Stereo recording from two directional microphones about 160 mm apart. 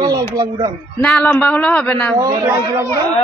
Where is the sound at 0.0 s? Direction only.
25° right (ahead or behind).